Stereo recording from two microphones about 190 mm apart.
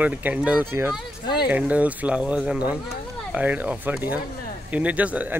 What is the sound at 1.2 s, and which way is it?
Speech, 55° left (ahead or behind).